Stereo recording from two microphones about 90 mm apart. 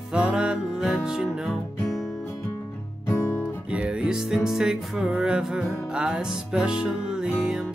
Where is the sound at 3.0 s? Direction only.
25° left (ahead or behind).